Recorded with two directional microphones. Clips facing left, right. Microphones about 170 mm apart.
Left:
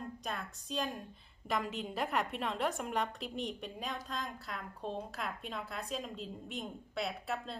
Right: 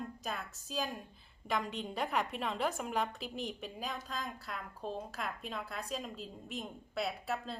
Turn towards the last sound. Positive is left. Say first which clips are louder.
# right 1 dB
turn(degrees=0)  # may be behind; listen again after turning